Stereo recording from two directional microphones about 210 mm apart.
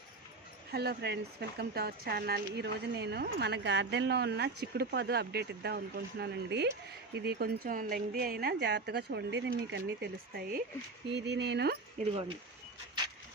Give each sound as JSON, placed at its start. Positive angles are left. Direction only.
{"t": 0.7, "sound": "speech", "side_deg": -50}
{"t": 11.9, "sound": "speech", "side_deg": -25}